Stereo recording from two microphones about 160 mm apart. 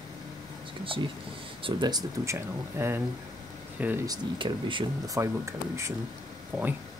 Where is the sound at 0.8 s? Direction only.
35° right (ahead or behind); by 4.0 s 10° right (ahead or behind).